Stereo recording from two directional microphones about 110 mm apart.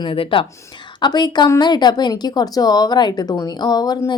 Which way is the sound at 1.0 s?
40° left (ahead or behind).